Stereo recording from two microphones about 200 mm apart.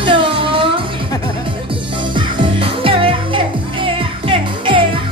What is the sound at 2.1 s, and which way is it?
Music, 25° right (ahead or behind).